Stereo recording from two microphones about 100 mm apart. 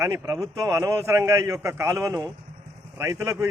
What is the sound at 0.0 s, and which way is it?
A man's voice, 30° right (ahead or behind).